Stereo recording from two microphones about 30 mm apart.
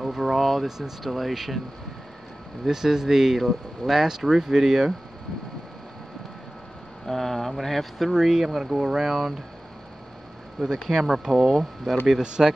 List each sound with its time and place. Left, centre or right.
0.0 s speech: centre
0.7 s speech: centre
2.6 s speech: centre
7.1 s speech: centre
8.1 s speech: centre
10.9 s speech: centre
11.8 s speech: centre
12.2 s speech: right